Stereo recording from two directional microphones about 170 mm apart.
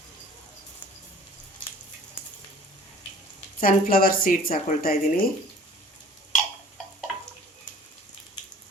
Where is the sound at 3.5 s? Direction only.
55° left (ahead or behind).